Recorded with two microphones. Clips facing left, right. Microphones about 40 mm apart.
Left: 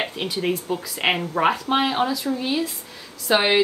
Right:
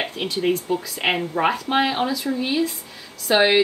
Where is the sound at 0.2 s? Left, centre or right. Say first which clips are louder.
Right 5 dB; centre.